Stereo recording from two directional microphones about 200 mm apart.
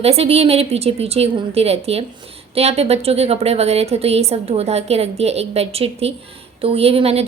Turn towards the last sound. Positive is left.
turn(degrees=-30)  # may be behind; listen again after turning